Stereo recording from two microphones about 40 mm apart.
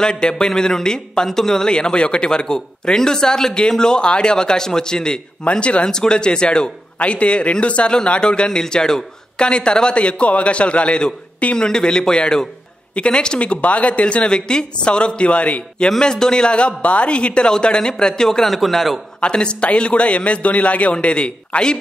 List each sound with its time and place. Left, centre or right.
0.0 s a man's voice: centre
5.4 s a man's voice: left
5.9 s a man's voice: centre
16.0 s a man's voice: centre
18.5 s a man's voice: centre
19.2 s a man's voice: left